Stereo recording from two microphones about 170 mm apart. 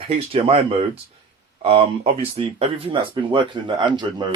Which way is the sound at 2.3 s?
35° right (ahead or behind).